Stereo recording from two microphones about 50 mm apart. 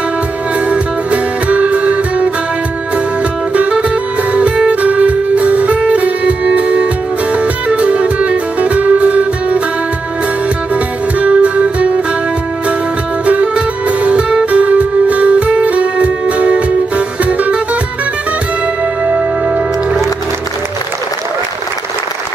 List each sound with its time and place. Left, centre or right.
0.7 s music: right
3.5 s music: right
10.7 s music: right
13.2 s music: right
19.0 s music: centre